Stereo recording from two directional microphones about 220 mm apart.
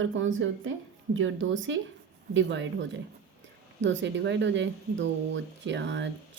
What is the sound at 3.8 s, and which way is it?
Speech, 55° right (ahead or behind).